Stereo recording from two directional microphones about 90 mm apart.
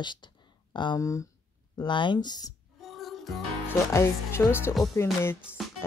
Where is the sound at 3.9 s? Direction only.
30° left (ahead or behind).